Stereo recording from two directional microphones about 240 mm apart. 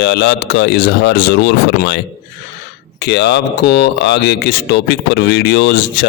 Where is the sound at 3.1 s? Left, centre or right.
Left.